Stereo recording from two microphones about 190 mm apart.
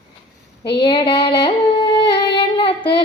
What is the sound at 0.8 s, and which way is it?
Female singing, 25° left (ahead or behind).